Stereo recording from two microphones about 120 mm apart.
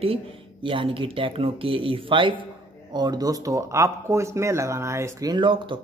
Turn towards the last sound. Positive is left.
turn(degrees=-45)  # may be behind; listen again after turning